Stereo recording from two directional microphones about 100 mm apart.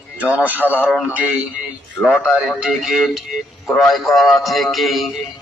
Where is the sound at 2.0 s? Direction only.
Centre (ahead or behind).